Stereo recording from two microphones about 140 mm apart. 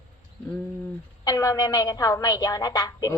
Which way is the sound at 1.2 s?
25° left (ahead or behind).